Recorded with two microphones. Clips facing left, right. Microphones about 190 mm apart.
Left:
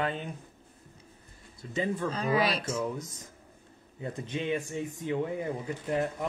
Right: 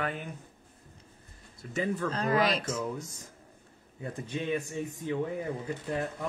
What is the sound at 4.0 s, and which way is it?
Speech, 20° left (ahead or behind).